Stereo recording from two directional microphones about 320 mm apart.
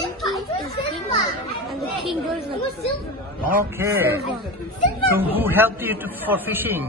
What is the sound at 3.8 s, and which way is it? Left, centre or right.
Speech, centre.